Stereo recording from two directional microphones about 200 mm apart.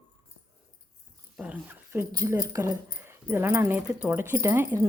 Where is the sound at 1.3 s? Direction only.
5° right (ahead or behind).